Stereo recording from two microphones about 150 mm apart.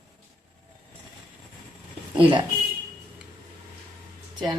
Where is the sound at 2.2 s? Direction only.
35° right (ahead or behind).